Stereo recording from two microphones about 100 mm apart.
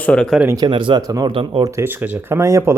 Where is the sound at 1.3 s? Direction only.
60° right (ahead or behind).